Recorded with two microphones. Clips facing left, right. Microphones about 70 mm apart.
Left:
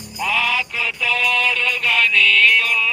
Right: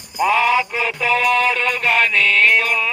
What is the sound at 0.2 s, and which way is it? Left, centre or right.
Music, right.